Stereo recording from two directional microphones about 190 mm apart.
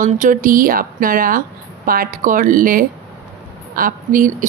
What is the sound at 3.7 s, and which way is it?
Speech, 45° right (ahead or behind).